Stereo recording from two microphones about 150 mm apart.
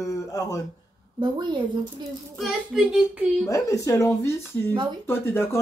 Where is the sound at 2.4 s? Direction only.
5° right (ahead or behind).